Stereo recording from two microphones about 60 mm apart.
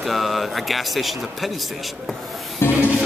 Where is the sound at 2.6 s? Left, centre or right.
Left.